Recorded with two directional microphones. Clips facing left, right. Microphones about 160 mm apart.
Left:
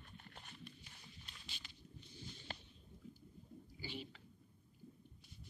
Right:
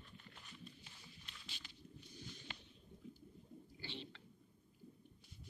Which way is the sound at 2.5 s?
40° left (ahead or behind).